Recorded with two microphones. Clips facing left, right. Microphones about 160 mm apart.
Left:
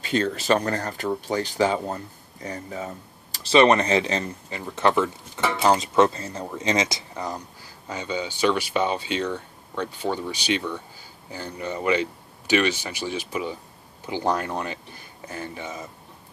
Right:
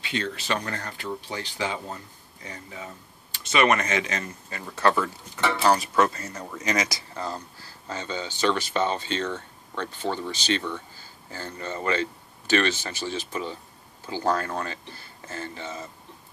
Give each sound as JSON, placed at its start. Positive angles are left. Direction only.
{"t": 0.0, "sound": "speech", "side_deg": 40}
{"t": 4.5, "sound": "speech", "side_deg": 20}